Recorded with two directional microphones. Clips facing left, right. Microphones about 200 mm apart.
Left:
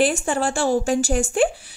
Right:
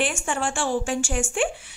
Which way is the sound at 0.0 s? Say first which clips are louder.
Left 6 dB; 35° left (ahead or behind).